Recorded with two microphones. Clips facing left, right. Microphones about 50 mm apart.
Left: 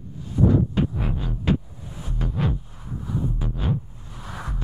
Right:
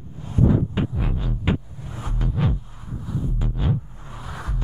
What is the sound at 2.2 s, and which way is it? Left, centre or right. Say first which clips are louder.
Music: right 1 dB; centre.